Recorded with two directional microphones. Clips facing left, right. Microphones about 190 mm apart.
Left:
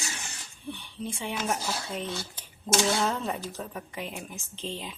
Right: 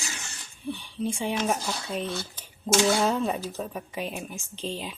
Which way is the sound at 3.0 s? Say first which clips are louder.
Right 4 dB; 15° right (ahead or behind).